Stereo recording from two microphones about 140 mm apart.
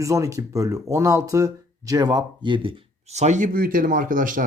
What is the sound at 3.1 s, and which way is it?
Speech, 55° right (ahead or behind).